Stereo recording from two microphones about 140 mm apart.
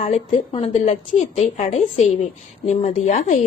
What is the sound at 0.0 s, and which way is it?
A woman's voice, 50° left (ahead or behind).